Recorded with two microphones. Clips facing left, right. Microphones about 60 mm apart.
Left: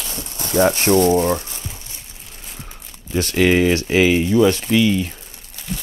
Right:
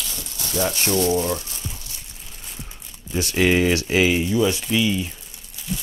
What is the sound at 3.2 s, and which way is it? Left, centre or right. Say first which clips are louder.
Speech: left 3 dB; left.